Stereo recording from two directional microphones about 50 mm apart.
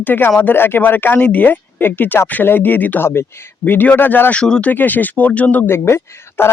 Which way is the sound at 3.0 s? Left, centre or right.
Left.